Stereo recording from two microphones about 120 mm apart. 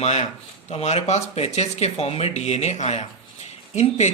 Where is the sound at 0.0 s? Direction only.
65° left (ahead or behind).